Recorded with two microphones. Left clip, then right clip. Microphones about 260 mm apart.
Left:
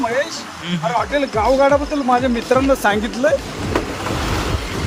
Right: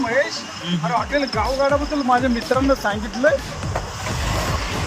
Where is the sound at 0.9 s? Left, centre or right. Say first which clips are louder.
Left 2 dB; left.